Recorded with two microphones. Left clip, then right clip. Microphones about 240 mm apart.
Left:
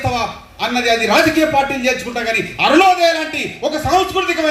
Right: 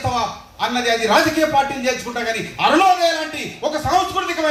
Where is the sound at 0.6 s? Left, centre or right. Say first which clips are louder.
Left 3 dB; right.